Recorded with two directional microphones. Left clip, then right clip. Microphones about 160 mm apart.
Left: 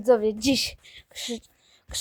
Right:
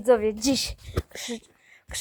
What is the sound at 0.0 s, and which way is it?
A woman's voice, centre (ahead or behind).